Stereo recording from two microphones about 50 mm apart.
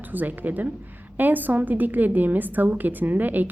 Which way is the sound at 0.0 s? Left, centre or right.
Right.